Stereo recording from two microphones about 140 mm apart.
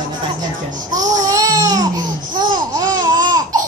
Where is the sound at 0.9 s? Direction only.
25° right (ahead or behind).